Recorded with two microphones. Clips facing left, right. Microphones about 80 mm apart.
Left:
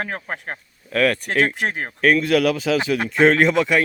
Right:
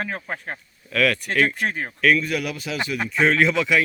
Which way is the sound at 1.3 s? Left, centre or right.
Left.